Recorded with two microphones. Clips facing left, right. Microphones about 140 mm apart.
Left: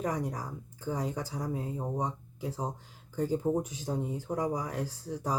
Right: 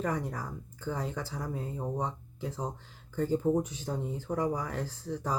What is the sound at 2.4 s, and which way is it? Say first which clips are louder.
Speech: left 1 dB; 35° left (ahead or behind).